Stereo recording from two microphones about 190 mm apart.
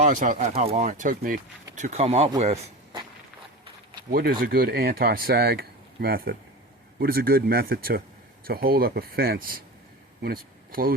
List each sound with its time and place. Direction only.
0.0 s speech: 45° right (ahead or behind)
1.8 s speech: 35° right (ahead or behind)
4.1 s speech: 50° right (ahead or behind)